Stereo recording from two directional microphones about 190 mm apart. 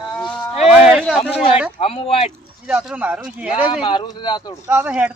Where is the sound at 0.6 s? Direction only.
5° right (ahead or behind).